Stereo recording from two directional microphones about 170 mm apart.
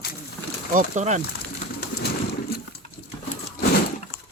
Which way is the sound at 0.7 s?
45° right (ahead or behind).